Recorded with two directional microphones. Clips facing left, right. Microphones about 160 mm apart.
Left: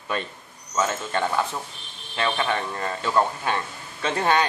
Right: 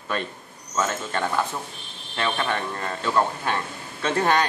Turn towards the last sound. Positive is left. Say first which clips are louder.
# right 1 dB
turn(degrees=10)  # may be behind; listen again after turning